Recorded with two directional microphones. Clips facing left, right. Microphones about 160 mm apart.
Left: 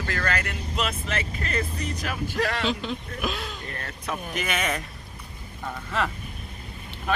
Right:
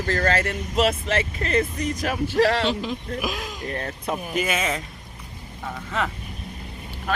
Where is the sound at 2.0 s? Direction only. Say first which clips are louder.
Right 8 dB; 45° right (ahead or behind).